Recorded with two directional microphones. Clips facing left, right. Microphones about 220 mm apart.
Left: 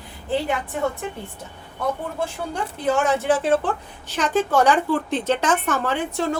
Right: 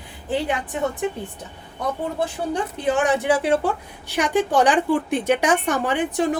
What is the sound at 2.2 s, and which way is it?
Speech, 20° right (ahead or behind).